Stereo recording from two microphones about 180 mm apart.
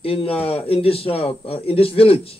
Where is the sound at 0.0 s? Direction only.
30° left (ahead or behind).